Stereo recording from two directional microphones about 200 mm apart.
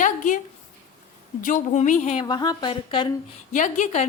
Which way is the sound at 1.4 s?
40° left (ahead or behind).